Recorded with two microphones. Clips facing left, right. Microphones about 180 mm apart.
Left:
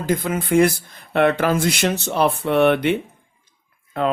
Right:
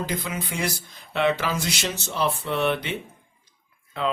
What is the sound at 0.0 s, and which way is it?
Speech, 50° left (ahead or behind).